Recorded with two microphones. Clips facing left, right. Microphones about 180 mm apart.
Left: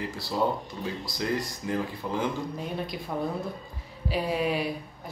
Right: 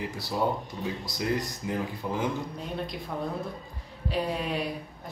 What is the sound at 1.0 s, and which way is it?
Speech, 20° right (ahead or behind).